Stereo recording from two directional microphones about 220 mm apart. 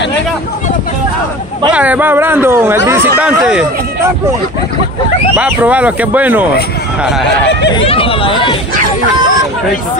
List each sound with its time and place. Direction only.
1.7 s speech: 5° right (ahead or behind)
5.3 s speech: 5° right (ahead or behind)
7.7 s speech: 25° left (ahead or behind)